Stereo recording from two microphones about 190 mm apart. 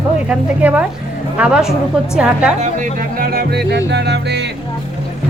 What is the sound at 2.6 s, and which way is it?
Speech, 45° right (ahead or behind).